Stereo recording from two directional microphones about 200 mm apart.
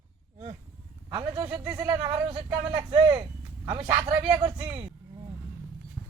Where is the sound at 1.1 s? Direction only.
20° right (ahead or behind).